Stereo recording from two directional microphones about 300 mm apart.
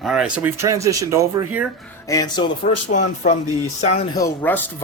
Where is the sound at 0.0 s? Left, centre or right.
Centre.